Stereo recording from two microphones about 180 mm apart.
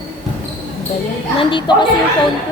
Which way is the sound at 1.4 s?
25° left (ahead or behind).